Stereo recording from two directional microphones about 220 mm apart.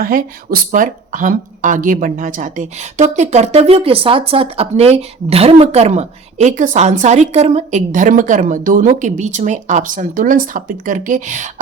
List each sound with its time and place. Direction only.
0.0 s speech: 40° right (ahead or behind)